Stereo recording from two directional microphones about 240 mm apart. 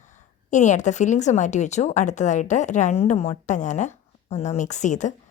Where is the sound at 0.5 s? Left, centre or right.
Left.